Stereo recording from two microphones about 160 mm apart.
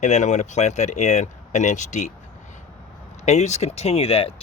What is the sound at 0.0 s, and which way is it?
Speech, 45° left (ahead or behind).